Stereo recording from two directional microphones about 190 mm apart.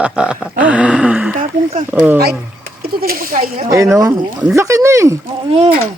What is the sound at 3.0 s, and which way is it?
Speech, 50° right (ahead or behind).